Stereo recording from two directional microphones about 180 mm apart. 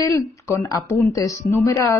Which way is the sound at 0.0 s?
20° left (ahead or behind).